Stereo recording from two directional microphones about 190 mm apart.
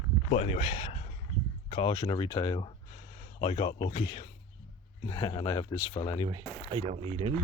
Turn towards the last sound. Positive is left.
turn(degrees=-30)  # may be behind; listen again after turning